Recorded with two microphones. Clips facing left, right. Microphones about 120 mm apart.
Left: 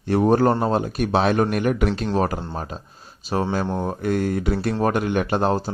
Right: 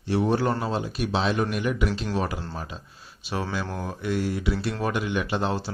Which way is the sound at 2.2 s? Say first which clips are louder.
Left 6 dB; 45° left (ahead or behind).